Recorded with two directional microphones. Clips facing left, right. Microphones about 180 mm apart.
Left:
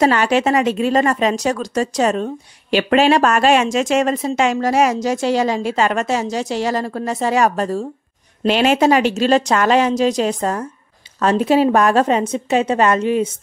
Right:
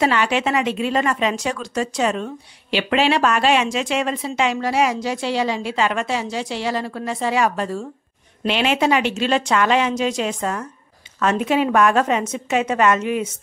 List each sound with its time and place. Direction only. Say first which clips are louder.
0.0 s a woman's voice: left 4 dB; 40° left (ahead or behind)